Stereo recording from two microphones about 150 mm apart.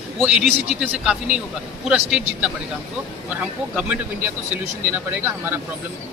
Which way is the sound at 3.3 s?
10° right (ahead or behind).